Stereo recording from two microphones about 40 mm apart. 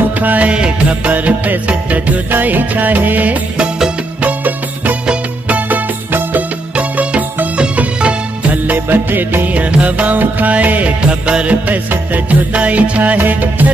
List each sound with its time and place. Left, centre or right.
0.2 s music: right
0.5 s music: right
1.1 s music: right
3.5 s music: right
4.2 s music: right
6.7 s music: right
8.7 s music: right
9.8 s music: right
11.0 s music: right
11.6 s music: right
12.5 s music: right
13.2 s music: right